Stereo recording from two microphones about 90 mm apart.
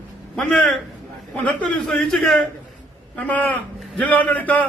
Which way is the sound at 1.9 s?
5° left (ahead or behind).